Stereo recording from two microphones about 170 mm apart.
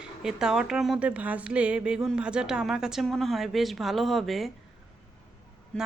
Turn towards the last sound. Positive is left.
turn(degrees=5)  # may be behind; listen again after turning